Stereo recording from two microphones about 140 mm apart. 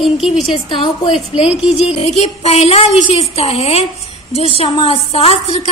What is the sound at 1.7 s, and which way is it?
A woman's voice, 50° left (ahead or behind).